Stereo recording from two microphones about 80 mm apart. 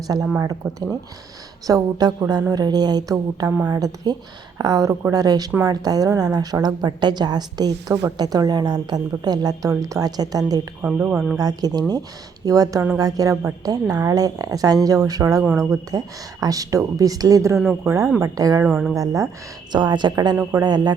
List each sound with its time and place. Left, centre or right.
0.1 s a woman's voice: right
0.6 s speech: right
1.6 s a woman's voice: right
10.8 s speech: right
11.3 s a woman's voice: right
18.2 s a woman's voice: right
18.7 s speech: centre
18.9 s a woman's voice: right
19.7 s speech: right
20.5 s a woman's voice: right